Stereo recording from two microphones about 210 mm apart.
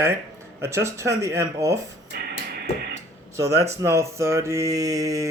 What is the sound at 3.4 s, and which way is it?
Speech, 15° right (ahead or behind).